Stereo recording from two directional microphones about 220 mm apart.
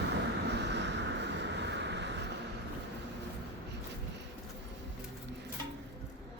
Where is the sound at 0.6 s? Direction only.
50° right (ahead or behind).